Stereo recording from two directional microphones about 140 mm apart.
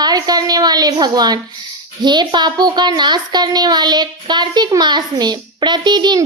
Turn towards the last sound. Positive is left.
turn(degrees=-30)  # may be behind; listen again after turning